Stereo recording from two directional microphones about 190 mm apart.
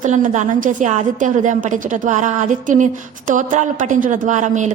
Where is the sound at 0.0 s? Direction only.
40° right (ahead or behind).